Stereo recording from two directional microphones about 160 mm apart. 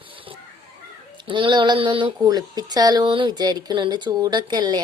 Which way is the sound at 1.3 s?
30° right (ahead or behind).